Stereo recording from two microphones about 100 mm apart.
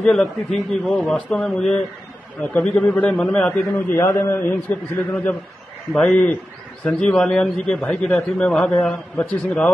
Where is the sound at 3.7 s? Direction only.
25° left (ahead or behind).